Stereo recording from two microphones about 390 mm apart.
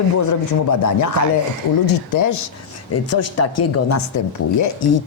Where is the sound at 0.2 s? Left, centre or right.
Left.